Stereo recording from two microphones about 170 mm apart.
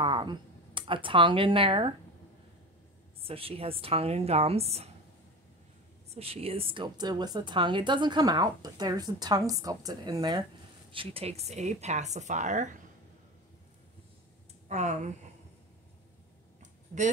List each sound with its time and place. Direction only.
0.0 s speech: 25° right (ahead or behind)
3.2 s speech: 35° right (ahead or behind)
6.0 s a woman's voice: 35° right (ahead or behind)
14.7 s speech: 45° right (ahead or behind)